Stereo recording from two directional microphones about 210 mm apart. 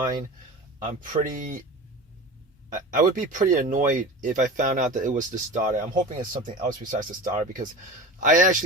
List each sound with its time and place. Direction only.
0.9 s speech: 40° right (ahead or behind)
2.6 s speech: 40° right (ahead or behind)